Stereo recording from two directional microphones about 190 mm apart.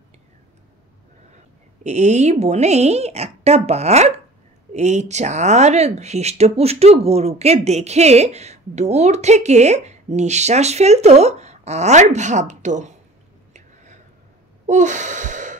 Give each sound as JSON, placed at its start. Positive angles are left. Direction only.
{"t": 1.8, "sound": "speech", "side_deg": -35}
{"t": 14.7, "sound": "gasp", "side_deg": -40}